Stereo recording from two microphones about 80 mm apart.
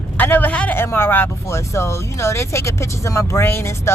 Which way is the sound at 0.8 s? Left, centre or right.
Left.